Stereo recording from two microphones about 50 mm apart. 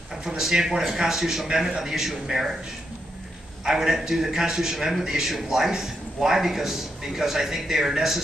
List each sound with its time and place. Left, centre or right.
0.4 s a man's voice: centre
3.6 s a man's voice: centre